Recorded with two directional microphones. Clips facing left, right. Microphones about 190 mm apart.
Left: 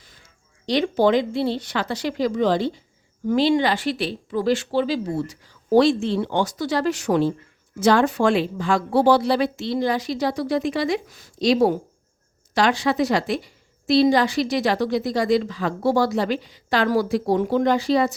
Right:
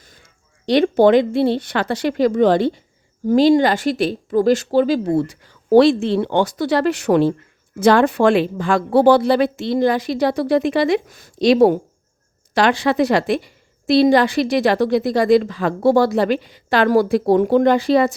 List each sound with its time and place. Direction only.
0.6 s a woman's voice: 60° right (ahead or behind)
3.2 s a woman's voice: 40° right (ahead or behind)